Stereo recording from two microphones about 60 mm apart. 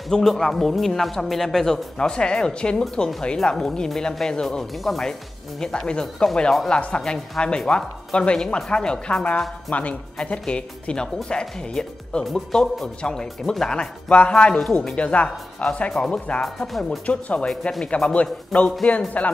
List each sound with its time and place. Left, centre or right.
0.1 s speech: centre
9.7 s speech: left
12.3 s speech: centre
12.8 s speech: centre
14.6 s speech: centre
15.0 s speech: left
17.5 s speech: centre
17.8 s speech: centre